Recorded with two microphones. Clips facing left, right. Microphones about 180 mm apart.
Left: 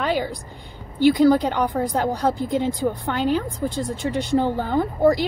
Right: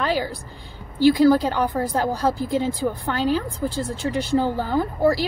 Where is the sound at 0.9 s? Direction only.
20° left (ahead or behind).